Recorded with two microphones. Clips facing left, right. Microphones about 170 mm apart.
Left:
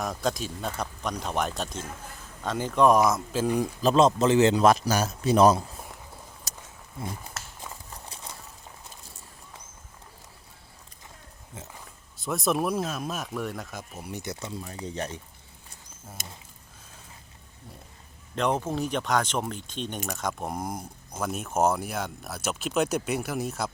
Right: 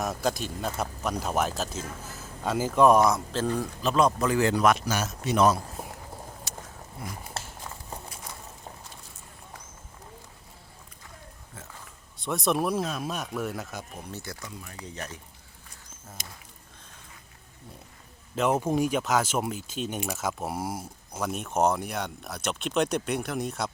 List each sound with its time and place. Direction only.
0.0 s speech: centre (ahead or behind)
3.4 s speech: 15° left (ahead or behind)
3.8 s a man's voice: 25° left (ahead or behind)
6.5 s a sound: 40° left (ahead or behind)
7.3 s a sound: 30° right (ahead or behind)
11.5 s dog: 20° left (ahead or behind)
12.1 s speech: centre (ahead or behind); by 15.2 s 30° left (ahead or behind)
16.2 s a sound: 50° left (ahead or behind)
18.3 s speech: 5° right (ahead or behind)